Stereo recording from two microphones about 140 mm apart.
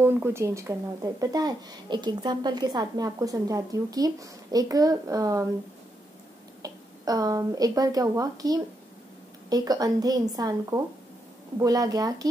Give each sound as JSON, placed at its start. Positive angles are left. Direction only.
{"t": 0.0, "sound": "a woman's voice", "side_deg": -15}
{"t": 6.6, "sound": "a woman's voice", "side_deg": -25}